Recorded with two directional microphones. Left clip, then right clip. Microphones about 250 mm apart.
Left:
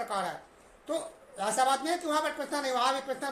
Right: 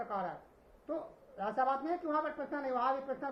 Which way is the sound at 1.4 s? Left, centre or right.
Centre.